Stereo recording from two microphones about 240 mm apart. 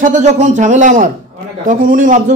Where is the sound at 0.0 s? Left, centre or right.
Right.